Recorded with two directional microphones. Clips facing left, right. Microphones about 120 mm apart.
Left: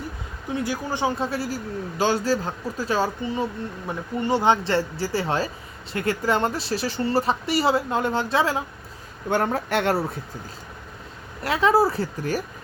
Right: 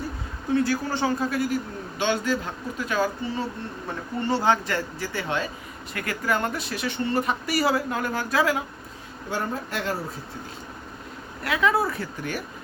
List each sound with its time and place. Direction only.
0.5 s speech: 15° left (ahead or behind)
1.2 s speech: 30° left (ahead or behind)
3.8 s speech: 15° left (ahead or behind)
9.3 s speech: 70° left (ahead or behind)
11.4 s speech: 30° left (ahead or behind)